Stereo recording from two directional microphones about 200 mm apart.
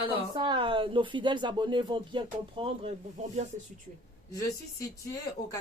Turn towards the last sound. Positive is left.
turn(degrees=15)  # may be behind; listen again after turning